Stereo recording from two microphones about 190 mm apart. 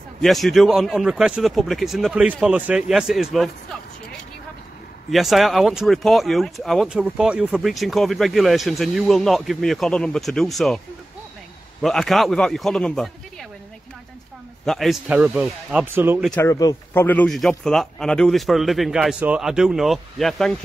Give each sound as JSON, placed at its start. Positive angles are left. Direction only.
{"t": 0.2, "sound": "speech", "side_deg": 0}
{"t": 5.1, "sound": "speech", "side_deg": 0}
{"t": 11.8, "sound": "speech", "side_deg": 0}
{"t": 14.6, "sound": "speech", "side_deg": 0}
{"t": 16.3, "sound": "speech", "side_deg": 15}